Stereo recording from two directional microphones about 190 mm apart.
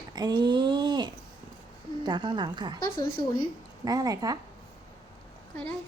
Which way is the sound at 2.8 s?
25° left (ahead or behind).